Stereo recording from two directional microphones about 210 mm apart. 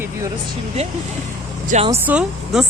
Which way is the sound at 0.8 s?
30° right (ahead or behind).